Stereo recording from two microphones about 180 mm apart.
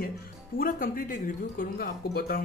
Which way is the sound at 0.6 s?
50° left (ahead or behind).